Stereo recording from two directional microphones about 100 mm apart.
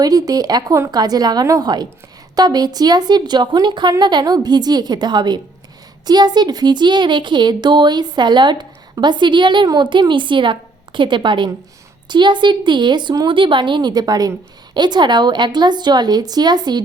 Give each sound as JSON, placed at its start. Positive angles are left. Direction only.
{"t": 0.0, "sound": "speech", "side_deg": -40}